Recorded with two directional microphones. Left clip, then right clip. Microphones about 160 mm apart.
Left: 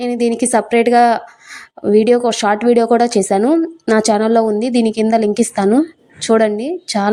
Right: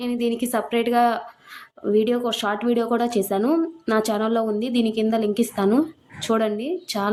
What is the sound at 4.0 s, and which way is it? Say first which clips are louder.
Speech: left 9 dB; 40° left (ahead or behind).